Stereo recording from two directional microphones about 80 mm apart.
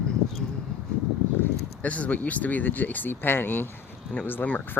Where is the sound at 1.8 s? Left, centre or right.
Centre.